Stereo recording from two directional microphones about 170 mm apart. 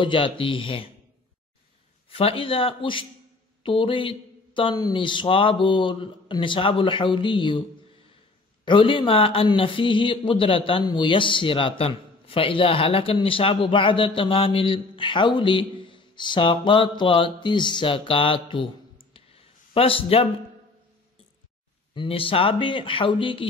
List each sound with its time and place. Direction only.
0.0 s speech: 30° left (ahead or behind)
2.0 s speech: 35° left (ahead or behind)
8.6 s speech: 30° left (ahead or behind)
19.1 s a sound: 35° left (ahead or behind)
21.9 s speech: 30° left (ahead or behind)